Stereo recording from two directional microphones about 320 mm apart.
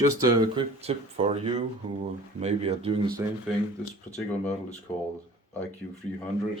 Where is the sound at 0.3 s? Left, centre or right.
Centre.